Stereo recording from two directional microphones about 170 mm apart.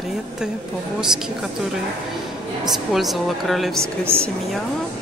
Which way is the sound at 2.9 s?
Centre (ahead or behind).